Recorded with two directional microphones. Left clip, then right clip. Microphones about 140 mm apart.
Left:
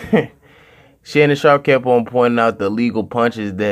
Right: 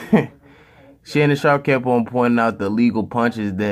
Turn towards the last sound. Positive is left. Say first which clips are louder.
# left 3 dB
turn(degrees=10)  # may be behind; listen again after turning